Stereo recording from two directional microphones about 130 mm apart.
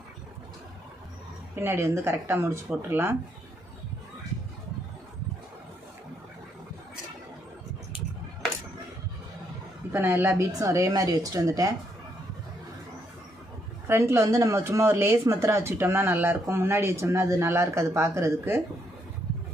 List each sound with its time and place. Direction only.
1.6 s speech: 20° right (ahead or behind)
9.9 s a woman's voice: 15° right (ahead or behind)
13.8 s speech: 20° right (ahead or behind)